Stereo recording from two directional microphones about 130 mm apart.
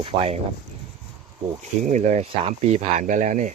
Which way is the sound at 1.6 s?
65° right (ahead or behind).